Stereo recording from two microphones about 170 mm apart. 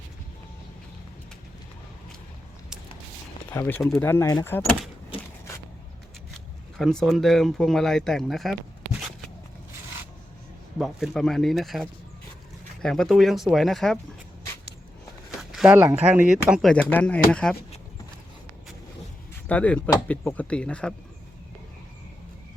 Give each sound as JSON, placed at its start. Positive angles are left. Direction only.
{"t": 3.5, "sound": "speech", "side_deg": 15}
{"t": 6.7, "sound": "speech", "side_deg": 0}
{"t": 10.8, "sound": "speech", "side_deg": 0}
{"t": 15.4, "sound": "speech", "side_deg": -5}
{"t": 19.5, "sound": "speech", "side_deg": 10}